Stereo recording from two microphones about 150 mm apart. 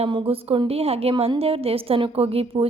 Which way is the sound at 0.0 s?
35° right (ahead or behind).